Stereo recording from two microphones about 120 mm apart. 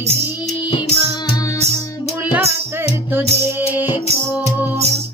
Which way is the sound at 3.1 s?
15° right (ahead or behind).